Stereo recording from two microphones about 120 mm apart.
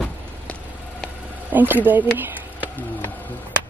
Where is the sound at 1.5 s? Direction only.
15° right (ahead or behind).